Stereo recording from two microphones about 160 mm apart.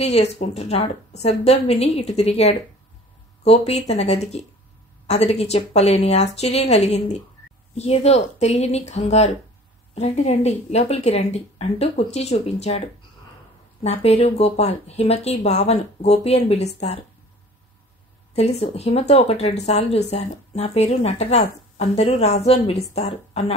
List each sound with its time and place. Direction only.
0.0 s a woman's voice: 45° left (ahead or behind)
13.8 s speech: 40° left (ahead or behind)
18.3 s speech: 40° left (ahead or behind)